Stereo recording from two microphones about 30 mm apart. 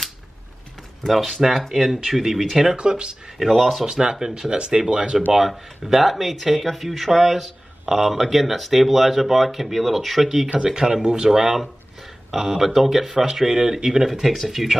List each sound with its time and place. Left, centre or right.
1.0 s speech: centre
2.7 s speech: right
3.4 s speech: centre
3.8 s speech: right
5.3 s speech: centre
6.5 s speech: centre
10.7 s speech: right
11.2 s speech: centre